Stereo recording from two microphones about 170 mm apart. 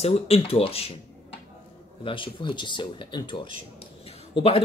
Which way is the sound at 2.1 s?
30° left (ahead or behind).